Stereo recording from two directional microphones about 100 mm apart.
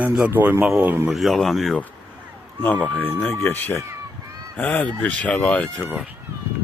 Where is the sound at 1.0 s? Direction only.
Centre (ahead or behind).